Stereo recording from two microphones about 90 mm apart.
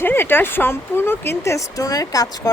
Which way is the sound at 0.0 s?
25° left (ahead or behind).